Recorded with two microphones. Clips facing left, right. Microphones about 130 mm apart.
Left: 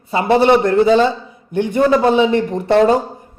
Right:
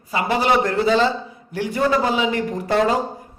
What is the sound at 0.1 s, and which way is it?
A man's voice, 30° left (ahead or behind).